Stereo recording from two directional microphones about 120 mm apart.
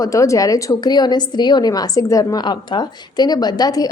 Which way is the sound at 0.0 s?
30° left (ahead or behind).